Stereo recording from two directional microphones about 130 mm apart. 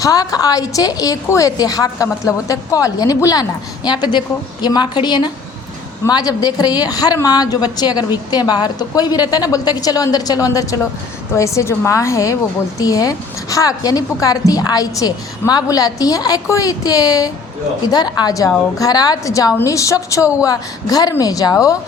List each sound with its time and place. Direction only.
0.0 s a woman's voice: 30° left (ahead or behind)